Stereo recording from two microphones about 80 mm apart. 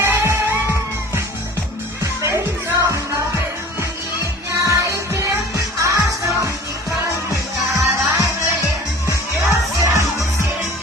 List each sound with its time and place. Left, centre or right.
0.0 s music: right
2.2 s music: right
7.9 s music: right
9.5 s music: right